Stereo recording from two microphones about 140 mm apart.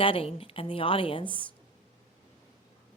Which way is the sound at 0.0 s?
40° left (ahead or behind).